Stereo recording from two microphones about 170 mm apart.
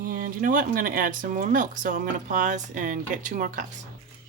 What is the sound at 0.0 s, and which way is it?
Speech, 55° right (ahead or behind).